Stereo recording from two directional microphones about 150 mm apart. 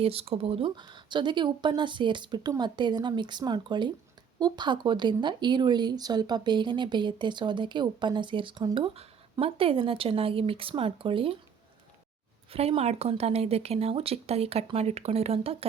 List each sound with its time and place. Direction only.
0.0 s speech: 40° right (ahead or behind)
12.5 s speech: 40° right (ahead or behind)